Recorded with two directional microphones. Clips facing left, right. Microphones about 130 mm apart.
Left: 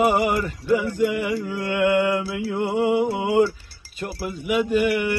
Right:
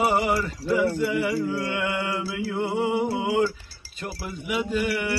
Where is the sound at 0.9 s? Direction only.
15° left (ahead or behind).